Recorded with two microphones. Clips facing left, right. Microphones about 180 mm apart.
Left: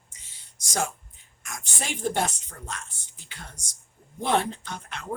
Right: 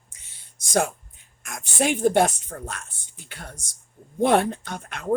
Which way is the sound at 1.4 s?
50° right (ahead or behind).